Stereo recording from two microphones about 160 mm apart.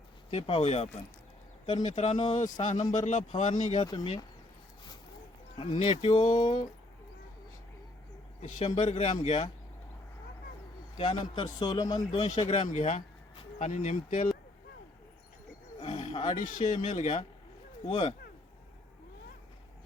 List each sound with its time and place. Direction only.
0.3 s speech: 35° left (ahead or behind)
2.4 s speech: 50° left (ahead or behind)
3.8 s speech: 30° left (ahead or behind)
5.5 s speech: 35° left (ahead or behind)
8.4 s speech: 45° left (ahead or behind)
10.9 s speech: 35° left (ahead or behind)
12.6 s speech: 45° left (ahead or behind)
15.8 s roaring cats: 35° left (ahead or behind)
16.4 s speech: 55° left (ahead or behind); by 18.1 s 40° left (ahead or behind)